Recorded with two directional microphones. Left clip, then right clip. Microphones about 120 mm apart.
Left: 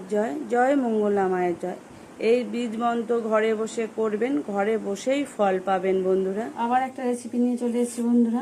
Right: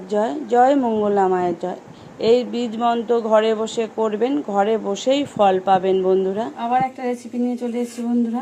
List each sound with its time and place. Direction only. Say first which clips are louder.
0.1 s a woman's voice: right 6 dB; 20° right (ahead or behind)
6.6 s a woman's voice: right 3 dB; 5° left (ahead or behind)